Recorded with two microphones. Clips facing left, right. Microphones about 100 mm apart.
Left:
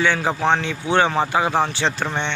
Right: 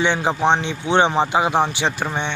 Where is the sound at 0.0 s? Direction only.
20° right (ahead or behind).